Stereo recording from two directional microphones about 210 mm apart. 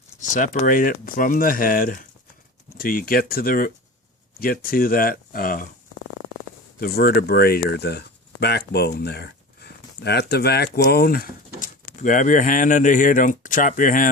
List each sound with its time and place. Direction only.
0.2 s speech: 40° left (ahead or behind)
6.7 s speech: 45° left (ahead or behind)